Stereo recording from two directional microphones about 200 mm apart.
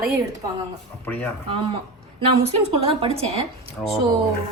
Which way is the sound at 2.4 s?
30° right (ahead or behind).